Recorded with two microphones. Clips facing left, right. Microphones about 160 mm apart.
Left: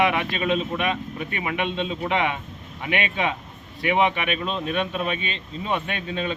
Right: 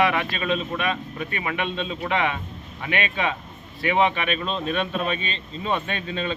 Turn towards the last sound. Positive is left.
turn(degrees=10)  # may be behind; listen again after turning